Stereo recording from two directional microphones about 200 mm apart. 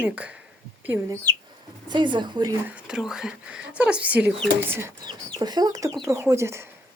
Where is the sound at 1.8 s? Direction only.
20° right (ahead or behind).